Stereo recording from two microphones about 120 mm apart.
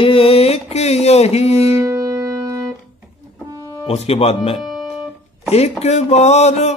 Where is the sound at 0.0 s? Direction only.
50° left (ahead or behind).